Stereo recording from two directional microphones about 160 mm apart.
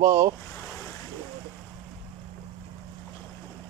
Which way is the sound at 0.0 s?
20° right (ahead or behind).